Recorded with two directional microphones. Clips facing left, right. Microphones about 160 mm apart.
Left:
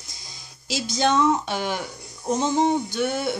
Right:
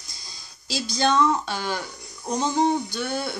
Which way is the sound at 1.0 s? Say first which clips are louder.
Left 1 dB; 20° left (ahead or behind).